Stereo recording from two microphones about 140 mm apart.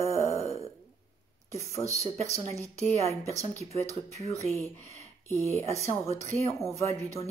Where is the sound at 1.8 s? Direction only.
45° left (ahead or behind).